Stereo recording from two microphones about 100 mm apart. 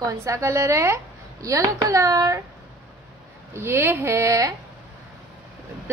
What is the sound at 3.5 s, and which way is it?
A child's voice, 25° right (ahead or behind).